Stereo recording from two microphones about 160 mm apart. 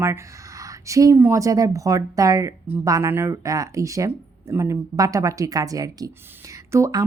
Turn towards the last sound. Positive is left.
turn(degrees=-20)  # may be behind; listen again after turning